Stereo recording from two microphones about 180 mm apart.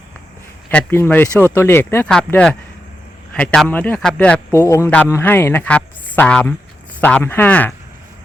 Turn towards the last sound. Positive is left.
turn(degrees=10)  # may be behind; listen again after turning